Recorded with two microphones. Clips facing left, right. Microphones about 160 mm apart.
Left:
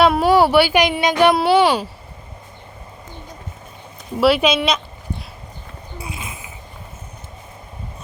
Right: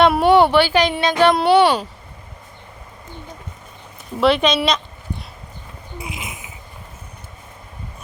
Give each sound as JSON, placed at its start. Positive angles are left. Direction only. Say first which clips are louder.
{"t": 0.0, "sound": "speech", "louder": "right 1 dB", "side_deg": 0}
{"t": 4.2, "sound": "speech", "louder": "left 1 dB", "side_deg": 5}
{"t": 6.0, "sound": "a sound", "louder": "right 1 dB", "side_deg": -20}